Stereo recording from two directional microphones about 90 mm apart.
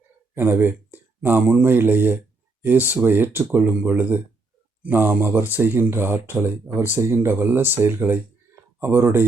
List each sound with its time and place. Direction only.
0.6 s speech: 20° right (ahead or behind)